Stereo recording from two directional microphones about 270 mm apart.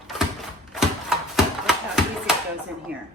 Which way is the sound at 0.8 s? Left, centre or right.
Centre.